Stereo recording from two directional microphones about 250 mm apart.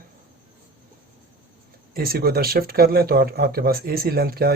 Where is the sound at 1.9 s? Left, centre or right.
Right.